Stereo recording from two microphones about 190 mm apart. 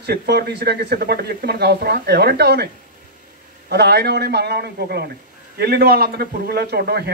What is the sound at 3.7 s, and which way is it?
Speech, 55° right (ahead or behind).